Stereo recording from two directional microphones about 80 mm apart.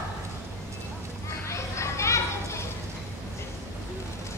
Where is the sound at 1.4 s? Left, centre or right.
Left.